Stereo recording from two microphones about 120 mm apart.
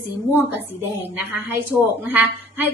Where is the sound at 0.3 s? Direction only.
20° right (ahead or behind).